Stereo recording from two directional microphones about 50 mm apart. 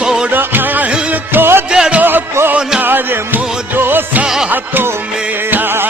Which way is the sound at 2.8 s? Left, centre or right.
Right.